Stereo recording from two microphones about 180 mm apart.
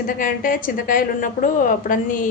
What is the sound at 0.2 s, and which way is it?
A woman's voice, 50° left (ahead or behind).